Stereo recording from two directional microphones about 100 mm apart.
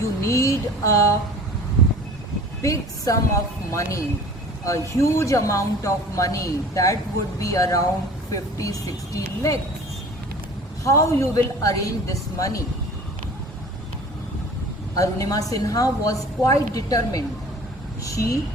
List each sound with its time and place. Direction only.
0.0 s speech: 30° left (ahead or behind)
2.6 s speech: 35° left (ahead or behind)
10.8 s speech: 30° left (ahead or behind)
14.9 s speech: 35° left (ahead or behind)